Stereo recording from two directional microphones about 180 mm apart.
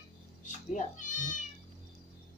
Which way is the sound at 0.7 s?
45° left (ahead or behind).